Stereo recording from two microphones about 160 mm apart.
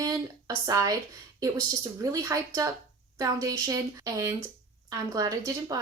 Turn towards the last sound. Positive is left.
turn(degrees=-25)  # may be behind; listen again after turning